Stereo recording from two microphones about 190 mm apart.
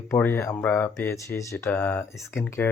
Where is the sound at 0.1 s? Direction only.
15° left (ahead or behind).